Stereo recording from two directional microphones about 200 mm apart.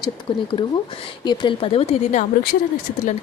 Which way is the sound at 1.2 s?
20° left (ahead or behind).